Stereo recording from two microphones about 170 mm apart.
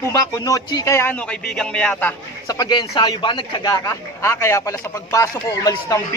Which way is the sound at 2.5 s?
25° left (ahead or behind).